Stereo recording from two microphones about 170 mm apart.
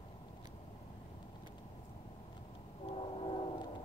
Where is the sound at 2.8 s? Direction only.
30° left (ahead or behind).